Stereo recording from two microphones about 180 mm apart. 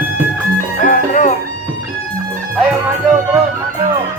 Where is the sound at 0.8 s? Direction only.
45° left (ahead or behind).